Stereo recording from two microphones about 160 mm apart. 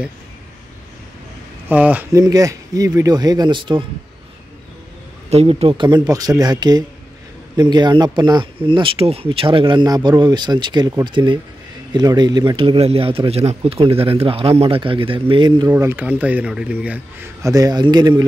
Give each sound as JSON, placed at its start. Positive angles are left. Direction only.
{"t": 1.7, "sound": "a man's voice", "side_deg": -10}
{"t": 2.1, "sound": "speech", "side_deg": -20}
{"t": 5.3, "sound": "speech", "side_deg": -40}
{"t": 15.7, "sound": "a man's voice", "side_deg": -15}